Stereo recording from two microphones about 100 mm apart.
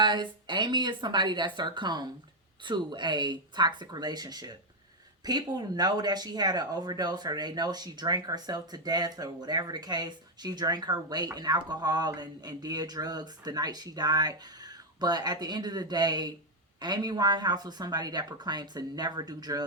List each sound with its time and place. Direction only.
0.0 s speech: 50° right (ahead or behind)